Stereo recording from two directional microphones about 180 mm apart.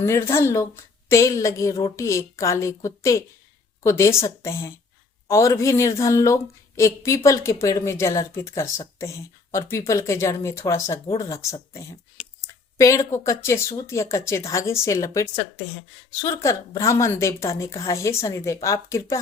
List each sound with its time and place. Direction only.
0.0 s speech: 15° left (ahead or behind)